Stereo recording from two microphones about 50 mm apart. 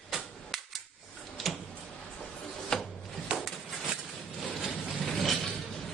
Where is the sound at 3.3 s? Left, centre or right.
Right.